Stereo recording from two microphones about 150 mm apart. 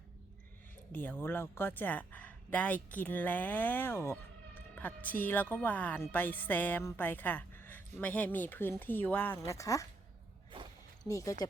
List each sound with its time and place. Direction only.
0.9 s speech: 10° left (ahead or behind)
10.5 s a sound: 35° right (ahead or behind)
11.0 s speech: 20° left (ahead or behind)